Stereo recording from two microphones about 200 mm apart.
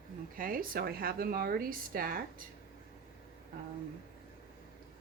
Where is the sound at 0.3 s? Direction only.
45° right (ahead or behind).